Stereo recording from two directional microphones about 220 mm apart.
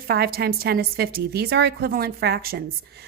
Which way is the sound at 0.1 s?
45° right (ahead or behind).